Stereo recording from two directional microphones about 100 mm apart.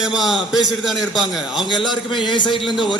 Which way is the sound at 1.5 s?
50° left (ahead or behind).